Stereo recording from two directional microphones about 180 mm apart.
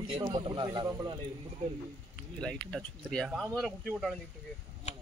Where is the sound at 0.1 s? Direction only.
25° right (ahead or behind).